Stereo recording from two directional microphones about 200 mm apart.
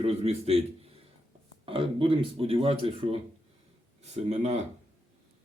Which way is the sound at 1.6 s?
25° right (ahead or behind).